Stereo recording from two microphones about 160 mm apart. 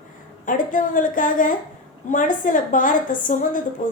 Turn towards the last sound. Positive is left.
turn(degrees=55)  # may be behind; listen again after turning